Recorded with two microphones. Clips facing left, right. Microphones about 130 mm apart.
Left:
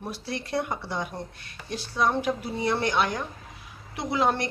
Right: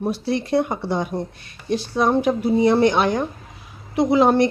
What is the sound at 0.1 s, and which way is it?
Speech, 20° right (ahead or behind).